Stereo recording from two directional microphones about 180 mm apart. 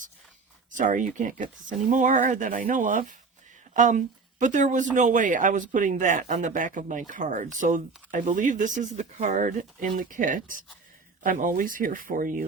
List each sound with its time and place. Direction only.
0.7 s speech: 45° right (ahead or behind)